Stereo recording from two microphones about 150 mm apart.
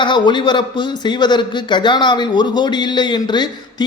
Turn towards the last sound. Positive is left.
turn(degrees=30)  # may be behind; listen again after turning